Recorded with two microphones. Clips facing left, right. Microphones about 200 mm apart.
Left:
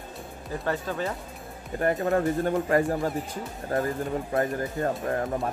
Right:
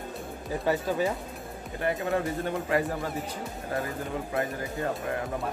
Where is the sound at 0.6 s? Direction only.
10° right (ahead or behind).